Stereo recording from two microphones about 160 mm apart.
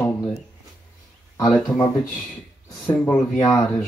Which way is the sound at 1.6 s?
25° left (ahead or behind).